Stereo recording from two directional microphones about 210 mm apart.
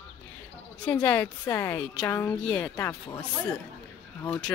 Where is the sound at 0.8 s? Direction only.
10° left (ahead or behind).